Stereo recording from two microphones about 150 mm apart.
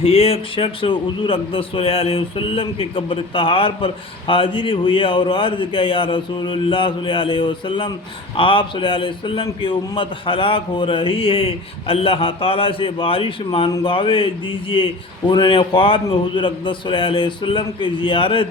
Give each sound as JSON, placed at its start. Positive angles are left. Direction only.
{"t": 0.0, "sound": "a man's voice", "side_deg": 40}
{"t": 13.7, "sound": "speech", "side_deg": 25}
{"t": 13.9, "sound": "a man's voice", "side_deg": 35}